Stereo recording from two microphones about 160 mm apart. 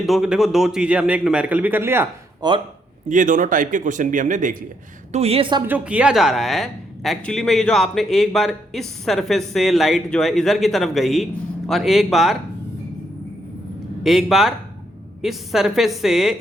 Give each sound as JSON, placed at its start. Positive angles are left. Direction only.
{"t": 0.0, "sound": "a man's voice", "side_deg": -5}
{"t": 2.4, "sound": "speech", "side_deg": -25}
{"t": 3.1, "sound": "speech", "side_deg": -55}
{"t": 5.1, "sound": "a woman's voice", "side_deg": -40}
{"t": 5.6, "sound": "speech", "side_deg": -10}
{"t": 14.0, "sound": "speech", "side_deg": 0}